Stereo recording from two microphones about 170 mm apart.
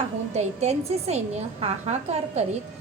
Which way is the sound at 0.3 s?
40° right (ahead or behind).